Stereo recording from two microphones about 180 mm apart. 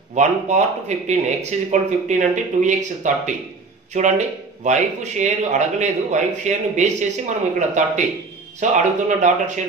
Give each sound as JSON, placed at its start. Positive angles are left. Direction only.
{"t": 0.1, "sound": "a man's voice", "side_deg": -40}